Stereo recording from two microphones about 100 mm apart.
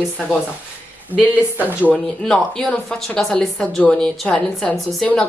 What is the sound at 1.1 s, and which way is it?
Speech, 20° right (ahead or behind).